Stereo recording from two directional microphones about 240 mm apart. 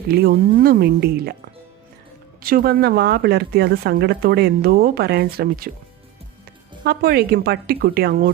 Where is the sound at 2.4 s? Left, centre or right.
Right.